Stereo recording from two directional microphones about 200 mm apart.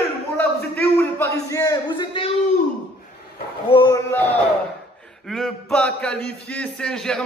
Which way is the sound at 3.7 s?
20° left (ahead or behind).